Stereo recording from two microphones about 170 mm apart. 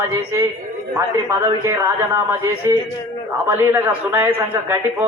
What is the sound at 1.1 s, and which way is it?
A man's voice, 20° right (ahead or behind).